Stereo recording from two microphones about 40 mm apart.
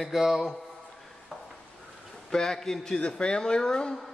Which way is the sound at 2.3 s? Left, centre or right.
Centre.